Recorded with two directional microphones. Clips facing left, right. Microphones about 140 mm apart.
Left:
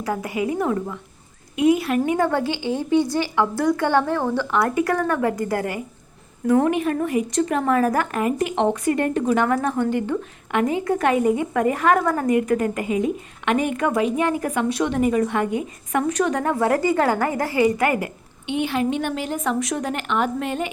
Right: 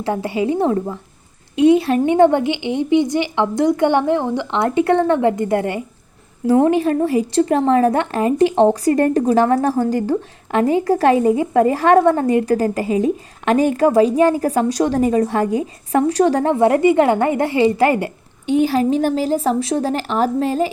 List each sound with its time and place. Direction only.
0.0 s a woman's voice: 30° right (ahead or behind)